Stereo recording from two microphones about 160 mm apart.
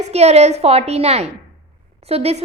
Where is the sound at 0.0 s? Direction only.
40° right (ahead or behind).